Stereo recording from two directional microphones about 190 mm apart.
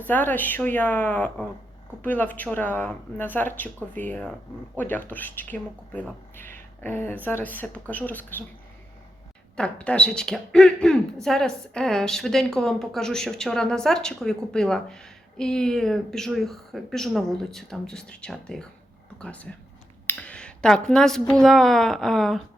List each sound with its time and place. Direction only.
0.1 s speech: 10° left (ahead or behind)
9.6 s a woman's voice: 5° left (ahead or behind)